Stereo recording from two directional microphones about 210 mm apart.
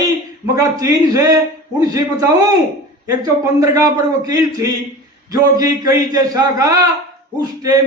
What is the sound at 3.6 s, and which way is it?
A man's voice, 15° right (ahead or behind).